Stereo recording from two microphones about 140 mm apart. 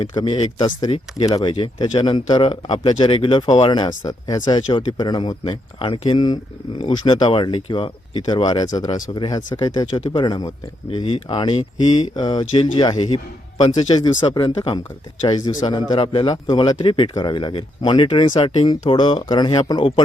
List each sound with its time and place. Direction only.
0.0 s speech: 35° left (ahead or behind)
16.3 s speech: 25° left (ahead or behind)